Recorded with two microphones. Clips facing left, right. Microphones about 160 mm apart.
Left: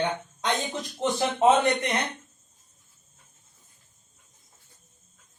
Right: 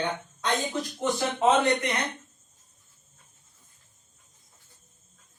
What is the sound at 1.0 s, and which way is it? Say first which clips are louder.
Speech: left 3 dB; 20° left (ahead or behind).